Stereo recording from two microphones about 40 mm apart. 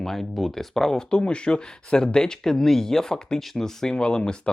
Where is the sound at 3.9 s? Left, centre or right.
Left.